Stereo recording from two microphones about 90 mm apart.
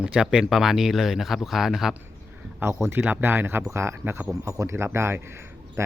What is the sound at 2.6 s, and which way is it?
Speech, 25° right (ahead or behind).